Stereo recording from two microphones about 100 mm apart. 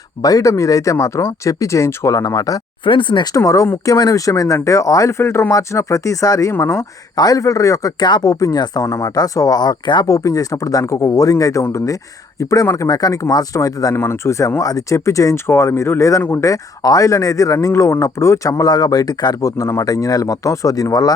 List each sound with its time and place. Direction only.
0.2 s speech: 35° left (ahead or behind)
2.8 s speech: 55° left (ahead or behind)
3.3 s speech: 35° left (ahead or behind)
7.2 s speech: 35° left (ahead or behind)
10.1 s speech: 35° left (ahead or behind)
13.9 s speech: 25° left (ahead or behind)